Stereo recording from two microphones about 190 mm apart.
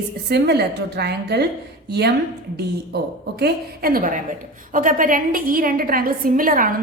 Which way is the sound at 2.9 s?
60° right (ahead or behind).